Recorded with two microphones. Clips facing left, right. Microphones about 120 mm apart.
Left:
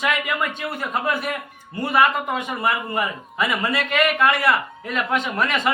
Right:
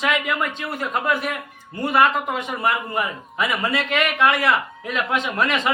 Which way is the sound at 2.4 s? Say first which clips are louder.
Even; centre (ahead or behind).